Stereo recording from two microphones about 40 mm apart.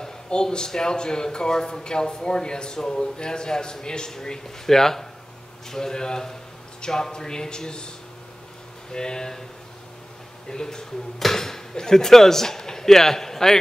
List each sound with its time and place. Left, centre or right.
0.0 s speech: left
8.9 s speech: centre
10.5 s speech: centre